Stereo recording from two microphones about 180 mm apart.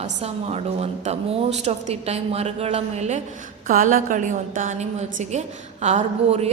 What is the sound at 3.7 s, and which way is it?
A woman's voice, 50° right (ahead or behind).